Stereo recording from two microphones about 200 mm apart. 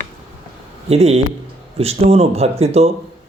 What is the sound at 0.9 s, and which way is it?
Speech, 30° right (ahead or behind).